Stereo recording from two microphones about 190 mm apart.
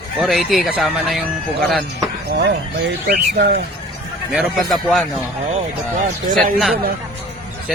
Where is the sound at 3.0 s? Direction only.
55° right (ahead or behind).